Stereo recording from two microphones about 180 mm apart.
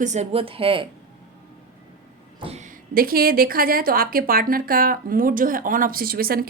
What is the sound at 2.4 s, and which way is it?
Speech, 40° right (ahead or behind).